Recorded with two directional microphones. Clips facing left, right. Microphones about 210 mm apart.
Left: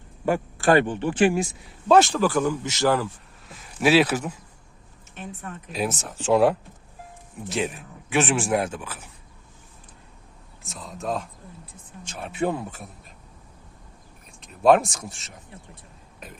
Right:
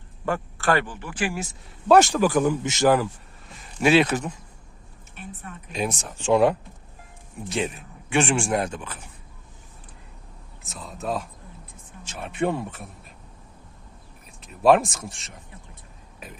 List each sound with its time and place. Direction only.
0.3 s speech: 15° left (ahead or behind)
1.9 s speech: 15° right (ahead or behind)
3.5 s speech: centre (ahead or behind)
5.7 s speech: 5° left (ahead or behind)
10.6 s speech: centre (ahead or behind)
14.4 s speech: centre (ahead or behind)